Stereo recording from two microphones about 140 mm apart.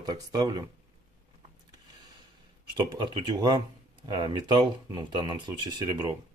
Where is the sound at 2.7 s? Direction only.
35° right (ahead or behind).